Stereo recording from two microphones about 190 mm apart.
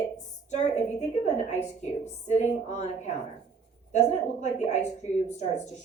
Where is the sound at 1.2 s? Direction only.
35° left (ahead or behind).